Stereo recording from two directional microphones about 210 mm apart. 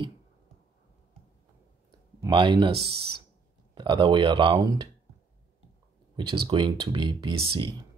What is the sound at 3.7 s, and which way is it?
Speech, 20° right (ahead or behind).